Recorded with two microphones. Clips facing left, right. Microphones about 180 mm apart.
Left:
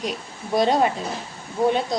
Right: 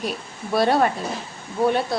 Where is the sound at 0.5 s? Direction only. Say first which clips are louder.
Even; 20° left (ahead or behind).